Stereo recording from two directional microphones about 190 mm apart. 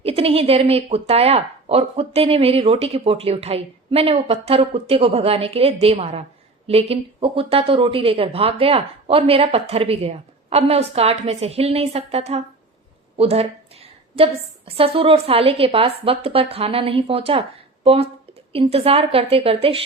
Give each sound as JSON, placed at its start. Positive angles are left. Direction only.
{"t": 0.0, "sound": "a woman's voice", "side_deg": -30}